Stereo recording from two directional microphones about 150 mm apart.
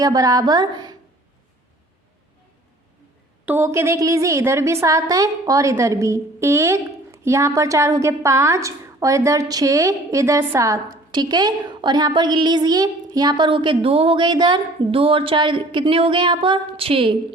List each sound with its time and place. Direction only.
0.0 s a woman's voice: 25° right (ahead or behind)
3.4 s a woman's voice: 15° right (ahead or behind); by 17.2 s 35° right (ahead or behind)